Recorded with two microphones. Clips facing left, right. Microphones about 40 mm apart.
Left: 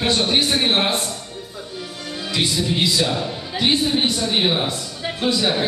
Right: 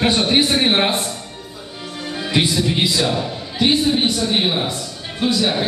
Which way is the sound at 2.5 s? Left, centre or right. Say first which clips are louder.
Right 2 dB; centre.